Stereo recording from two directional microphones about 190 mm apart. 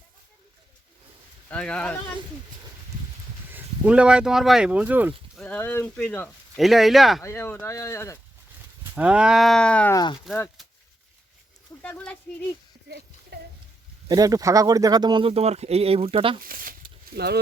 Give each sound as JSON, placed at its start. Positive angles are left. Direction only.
{"t": 1.5, "sound": "speech", "side_deg": 5}
{"t": 3.5, "sound": "speech", "side_deg": -5}
{"t": 5.4, "sound": "speech", "side_deg": 10}
{"t": 7.2, "sound": "speech", "side_deg": 15}
{"t": 8.8, "sound": "speech", "side_deg": -5}
{"t": 9.9, "sound": "speech", "side_deg": 20}
{"t": 11.8, "sound": "speech", "side_deg": 10}
{"t": 13.3, "sound": "a sound", "side_deg": -60}
{"t": 14.1, "sound": "speech", "side_deg": -20}
{"t": 16.4, "sound": "speech", "side_deg": -50}